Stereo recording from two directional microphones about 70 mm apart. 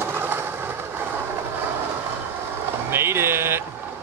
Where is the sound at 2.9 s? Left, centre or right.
Right.